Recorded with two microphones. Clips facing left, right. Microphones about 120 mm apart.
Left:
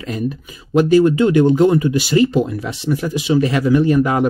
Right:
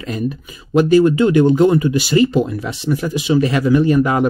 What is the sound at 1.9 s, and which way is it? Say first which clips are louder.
Speech: even; 50° right (ahead or behind).